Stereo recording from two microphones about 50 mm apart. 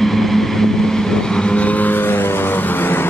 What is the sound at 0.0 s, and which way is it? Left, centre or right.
Vehicle, centre.